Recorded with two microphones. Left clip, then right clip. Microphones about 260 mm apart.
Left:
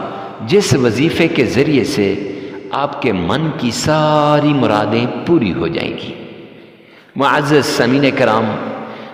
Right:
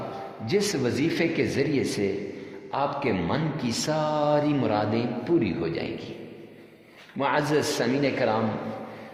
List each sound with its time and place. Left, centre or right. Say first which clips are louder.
0.4 s mantra: left 13 dB; left
7.2 s mantra: left 12 dB; left